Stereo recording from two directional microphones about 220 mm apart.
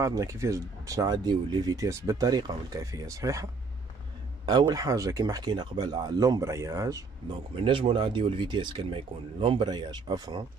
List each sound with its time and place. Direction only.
0.0 s speech: 15° right (ahead or behind)
4.5 s speech: 20° right (ahead or behind)